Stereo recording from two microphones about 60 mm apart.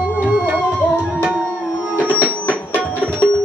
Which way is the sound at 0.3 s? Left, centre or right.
Centre.